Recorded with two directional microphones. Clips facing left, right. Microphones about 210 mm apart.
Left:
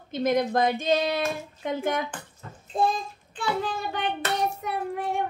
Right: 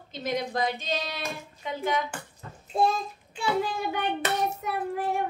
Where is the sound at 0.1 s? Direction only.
50° left (ahead or behind).